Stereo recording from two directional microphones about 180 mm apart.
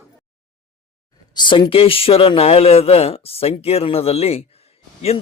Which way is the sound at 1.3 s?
25° left (ahead or behind).